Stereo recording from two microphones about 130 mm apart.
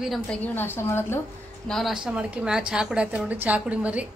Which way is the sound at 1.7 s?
Centre (ahead or behind).